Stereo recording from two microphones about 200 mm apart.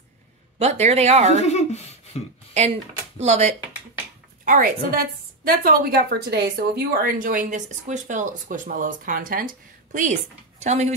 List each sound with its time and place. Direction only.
0.6 s speech: 35° right (ahead or behind)
1.5 s a sound: 35° left (ahead or behind)
3.2 s a woman's voice: 35° right (ahead or behind)